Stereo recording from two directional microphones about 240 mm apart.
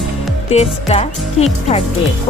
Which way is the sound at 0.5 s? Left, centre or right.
Left.